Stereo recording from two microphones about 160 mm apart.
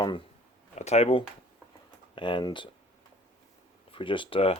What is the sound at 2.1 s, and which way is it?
Speech, 30° left (ahead or behind).